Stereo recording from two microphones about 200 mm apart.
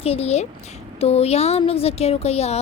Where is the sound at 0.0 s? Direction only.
30° left (ahead or behind).